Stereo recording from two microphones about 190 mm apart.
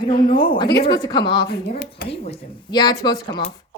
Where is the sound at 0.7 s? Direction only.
55° left (ahead or behind).